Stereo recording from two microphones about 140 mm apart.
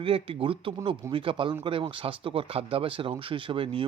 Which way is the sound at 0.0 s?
40° right (ahead or behind).